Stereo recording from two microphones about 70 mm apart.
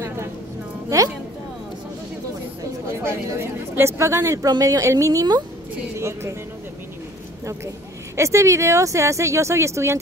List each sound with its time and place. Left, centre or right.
0.8 s a woman's voice: right
2.9 s a woman's voice: right
8.2 s speech: right